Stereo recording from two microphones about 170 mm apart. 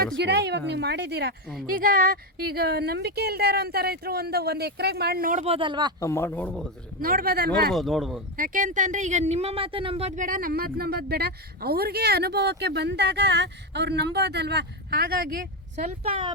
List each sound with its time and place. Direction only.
0.2 s speech: 85° right
1.6 s speech: 55° right (ahead or behind)
5.5 s speech: 30° right (ahead or behind)
6.0 s speech: 15° left (ahead or behind)
7.0 s speech: 55° right (ahead or behind)
7.7 s speech: centre (ahead or behind)
8.4 s speech: 50° right (ahead or behind)
15.7 s speech: 40° right (ahead or behind)